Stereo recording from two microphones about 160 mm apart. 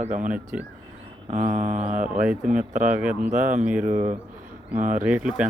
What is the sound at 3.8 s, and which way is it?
Speech, 50° right (ahead or behind).